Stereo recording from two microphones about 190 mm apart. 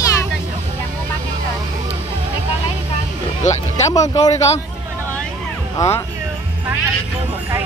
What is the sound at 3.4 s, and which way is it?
Speech, 40° left (ahead or behind).